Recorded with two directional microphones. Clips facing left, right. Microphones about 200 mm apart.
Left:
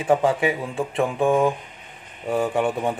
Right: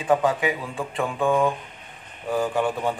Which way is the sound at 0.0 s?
30° left (ahead or behind).